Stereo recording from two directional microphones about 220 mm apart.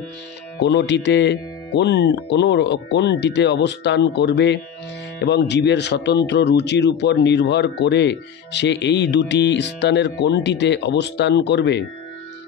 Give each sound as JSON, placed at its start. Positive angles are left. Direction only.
{"t": 0.6, "sound": "speech", "side_deg": 50}